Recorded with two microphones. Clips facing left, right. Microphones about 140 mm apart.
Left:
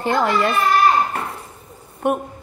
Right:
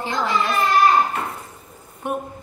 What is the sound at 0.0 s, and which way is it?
Speech, 60° left (ahead or behind).